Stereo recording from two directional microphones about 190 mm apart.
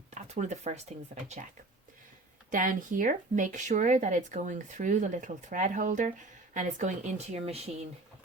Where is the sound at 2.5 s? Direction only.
45° right (ahead or behind).